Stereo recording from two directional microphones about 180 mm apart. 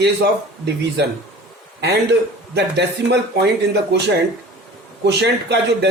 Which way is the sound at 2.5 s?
70° right (ahead or behind).